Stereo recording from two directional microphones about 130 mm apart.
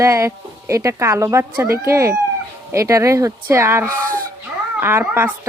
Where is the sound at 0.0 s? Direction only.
20° right (ahead or behind).